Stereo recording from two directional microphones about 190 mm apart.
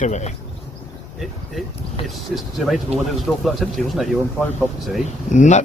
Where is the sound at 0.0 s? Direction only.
40° left (ahead or behind).